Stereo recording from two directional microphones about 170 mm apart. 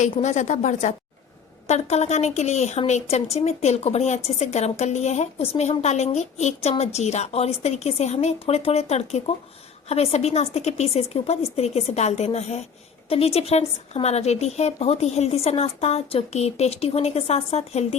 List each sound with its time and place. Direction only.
0.0 s a woman's voice: 45° left (ahead or behind)